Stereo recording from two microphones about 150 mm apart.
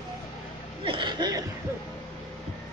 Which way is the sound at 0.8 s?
35° right (ahead or behind).